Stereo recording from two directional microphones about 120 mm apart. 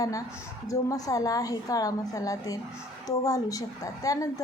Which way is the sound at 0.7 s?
30° left (ahead or behind).